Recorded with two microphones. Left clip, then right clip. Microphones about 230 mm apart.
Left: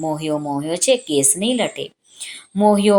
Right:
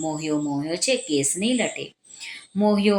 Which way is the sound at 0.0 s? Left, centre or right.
Left.